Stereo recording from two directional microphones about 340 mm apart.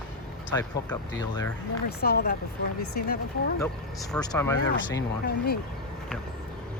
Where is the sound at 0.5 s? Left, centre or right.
Centre.